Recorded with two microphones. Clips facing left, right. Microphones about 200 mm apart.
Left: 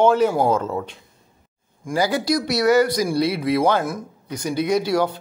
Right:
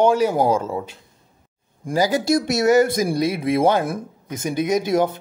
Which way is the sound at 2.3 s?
20° right (ahead or behind).